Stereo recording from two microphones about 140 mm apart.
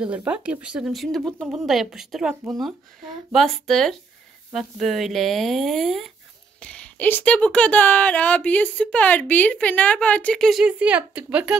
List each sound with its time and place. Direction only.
0.0 s speech: 10° right (ahead or behind)